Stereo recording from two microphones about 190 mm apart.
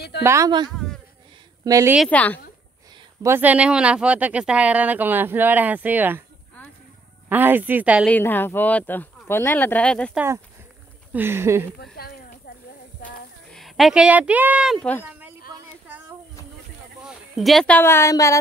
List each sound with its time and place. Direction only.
0.2 s speech: 15° right (ahead or behind)
0.7 s a sound: 5° left (ahead or behind)
1.6 s a woman's voice: 15° right (ahead or behind)
2.0 s speech: 10° left (ahead or behind)
3.2 s speech: 10° right (ahead or behind)
7.2 s speech: 10° right (ahead or behind)
8.1 s speech: 10° left (ahead or behind)
10.1 s speech: 15° right (ahead or behind)
11.8 s a sound: 55° left (ahead or behind)
13.5 s speech: centre (ahead or behind)
14.8 s speech: 10° left (ahead or behind)
15.0 s a sound: 10° right (ahead or behind)
17.0 s speech: centre (ahead or behind); by 18.4 s 15° left (ahead or behind)